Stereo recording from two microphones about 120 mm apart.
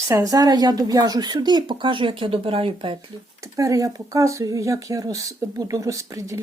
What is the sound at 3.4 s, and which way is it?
Speech, 30° right (ahead or behind).